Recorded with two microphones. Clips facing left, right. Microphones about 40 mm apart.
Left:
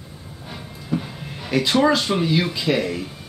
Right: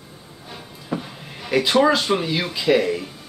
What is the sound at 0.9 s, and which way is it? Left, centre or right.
Speech, centre.